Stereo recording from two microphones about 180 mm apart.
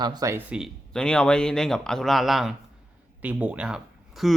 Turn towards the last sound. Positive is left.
turn(degrees=-5)  # may be behind; listen again after turning